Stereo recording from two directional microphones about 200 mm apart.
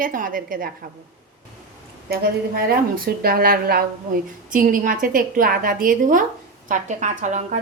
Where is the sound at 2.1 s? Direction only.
50° right (ahead or behind).